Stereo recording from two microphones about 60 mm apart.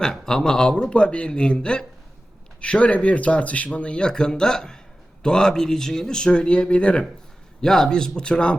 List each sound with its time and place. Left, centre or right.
0.0 s a man's voice: centre